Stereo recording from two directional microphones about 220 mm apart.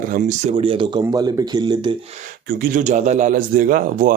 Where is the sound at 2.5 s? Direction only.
35° right (ahead or behind).